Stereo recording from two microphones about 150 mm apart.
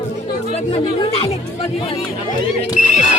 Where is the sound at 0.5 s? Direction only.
40° left (ahead or behind).